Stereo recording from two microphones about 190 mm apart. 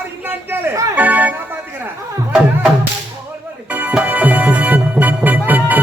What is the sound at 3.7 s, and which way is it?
Music, 10° right (ahead or behind).